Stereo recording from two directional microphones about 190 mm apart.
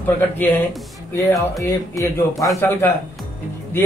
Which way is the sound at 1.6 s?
15° left (ahead or behind).